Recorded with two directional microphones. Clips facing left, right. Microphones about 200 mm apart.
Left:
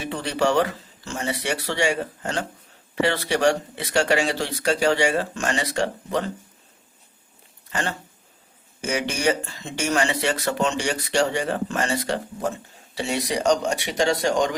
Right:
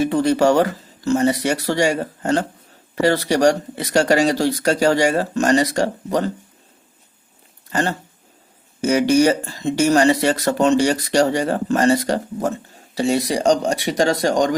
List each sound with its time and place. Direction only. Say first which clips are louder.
0.0 s speech: right 8 dB; 45° right (ahead or behind)
7.7 s speech: right 7 dB; 35° right (ahead or behind)